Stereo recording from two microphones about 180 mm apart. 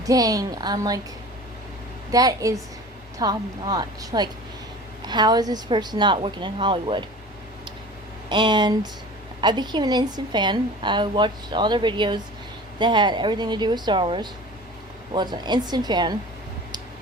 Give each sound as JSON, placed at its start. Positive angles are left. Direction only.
{"t": 0.0, "sound": "a woman's voice", "side_deg": -20}
{"t": 2.1, "sound": "a woman's voice", "side_deg": -20}
{"t": 8.3, "sound": "a woman's voice", "side_deg": -25}